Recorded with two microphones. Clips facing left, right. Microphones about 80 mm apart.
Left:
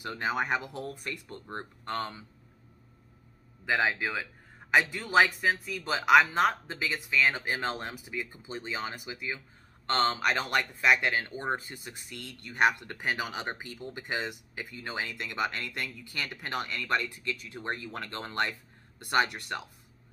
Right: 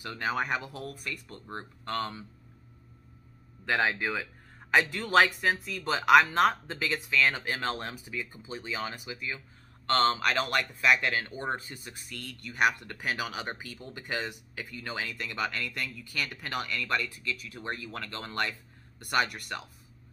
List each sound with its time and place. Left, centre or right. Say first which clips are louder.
0.0 s speech: even; centre
0.7 s speech: left 1 dB; left
1.9 s speech: right 1 dB; centre
3.6 s a man's voice: even; centre; by 19.6 s left